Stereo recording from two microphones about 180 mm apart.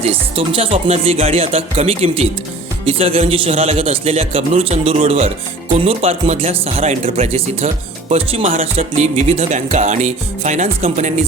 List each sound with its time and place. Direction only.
0.0 s speech: 30° right (ahead or behind)